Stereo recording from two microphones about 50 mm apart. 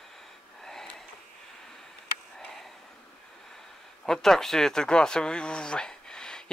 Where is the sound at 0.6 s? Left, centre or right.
Centre.